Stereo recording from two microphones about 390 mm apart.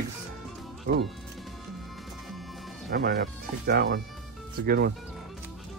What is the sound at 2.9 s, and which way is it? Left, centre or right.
Speech, right.